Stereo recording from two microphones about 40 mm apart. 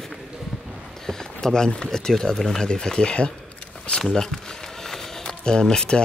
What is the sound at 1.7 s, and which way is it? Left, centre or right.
Speech, centre.